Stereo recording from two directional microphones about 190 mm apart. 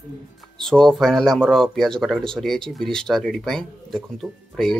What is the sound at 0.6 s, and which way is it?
Speech, centre (ahead or behind).